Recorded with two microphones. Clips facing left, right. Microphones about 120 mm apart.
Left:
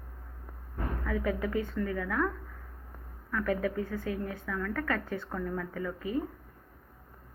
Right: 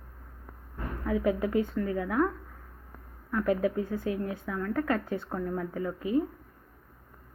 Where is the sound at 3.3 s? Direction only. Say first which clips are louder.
Right 3 dB; 15° right (ahead or behind).